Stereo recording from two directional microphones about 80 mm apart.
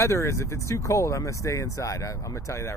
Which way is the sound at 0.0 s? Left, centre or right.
Left.